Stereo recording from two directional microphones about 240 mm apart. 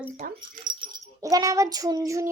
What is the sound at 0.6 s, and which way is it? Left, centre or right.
Speech, centre.